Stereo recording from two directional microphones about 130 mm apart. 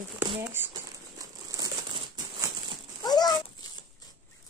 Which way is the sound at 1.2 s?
30° right (ahead or behind).